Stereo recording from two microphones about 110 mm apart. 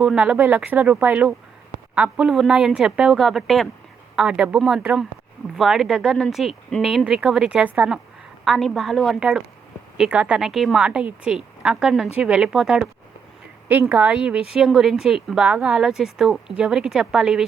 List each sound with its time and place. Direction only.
0.0 s a woman's voice: 10° right (ahead or behind)
10.0 s a woman's voice: 10° right (ahead or behind)
13.7 s a woman's voice: 20° right (ahead or behind)